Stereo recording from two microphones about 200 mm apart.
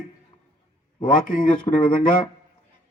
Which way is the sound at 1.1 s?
40° left (ahead or behind).